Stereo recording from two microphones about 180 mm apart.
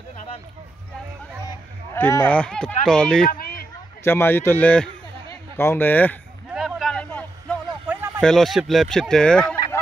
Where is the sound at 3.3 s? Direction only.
55° left (ahead or behind).